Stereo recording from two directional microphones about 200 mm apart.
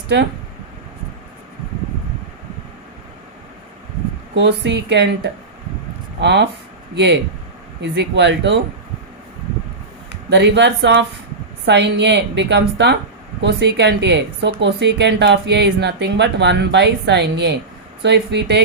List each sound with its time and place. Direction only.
4.4 s speech: 60° right (ahead or behind)
10.2 s speech: 60° right (ahead or behind)